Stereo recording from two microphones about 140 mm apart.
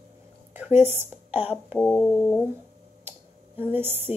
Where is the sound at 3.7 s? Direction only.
15° right (ahead or behind).